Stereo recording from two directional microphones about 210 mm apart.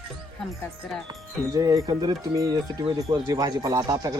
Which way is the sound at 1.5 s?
15° right (ahead or behind).